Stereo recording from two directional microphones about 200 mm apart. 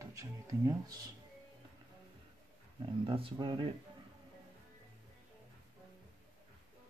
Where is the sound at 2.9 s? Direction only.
25° right (ahead or behind).